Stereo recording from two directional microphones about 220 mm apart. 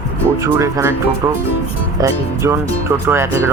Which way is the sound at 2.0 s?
15° right (ahead or behind).